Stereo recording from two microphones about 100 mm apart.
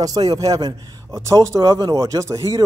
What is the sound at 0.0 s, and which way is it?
Speech, 40° right (ahead or behind).